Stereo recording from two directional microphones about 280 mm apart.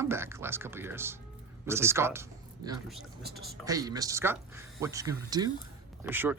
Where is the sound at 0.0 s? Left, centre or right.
Centre.